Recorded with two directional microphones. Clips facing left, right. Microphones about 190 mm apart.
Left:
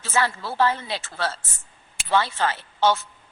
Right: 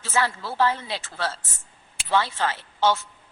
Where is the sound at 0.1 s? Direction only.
60° left (ahead or behind).